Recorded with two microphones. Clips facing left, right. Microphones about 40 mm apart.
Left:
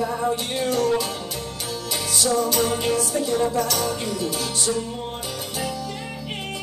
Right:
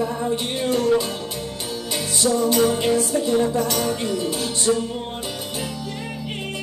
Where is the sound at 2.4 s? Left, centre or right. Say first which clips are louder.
Right 3 dB; centre.